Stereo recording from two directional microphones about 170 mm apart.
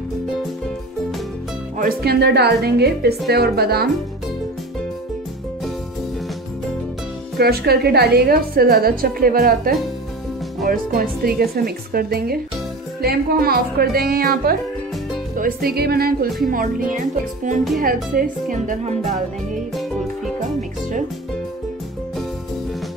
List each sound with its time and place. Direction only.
1.8 s a woman's voice: 65° right (ahead or behind)
7.3 s a woman's voice: 65° right (ahead or behind); by 19.1 s 45° right (ahead or behind)